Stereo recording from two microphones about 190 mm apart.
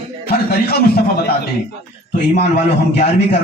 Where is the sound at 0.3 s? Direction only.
55° left (ahead or behind).